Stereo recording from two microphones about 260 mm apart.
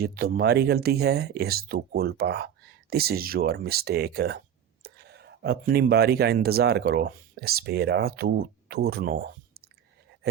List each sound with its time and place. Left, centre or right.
0.0 s speech: right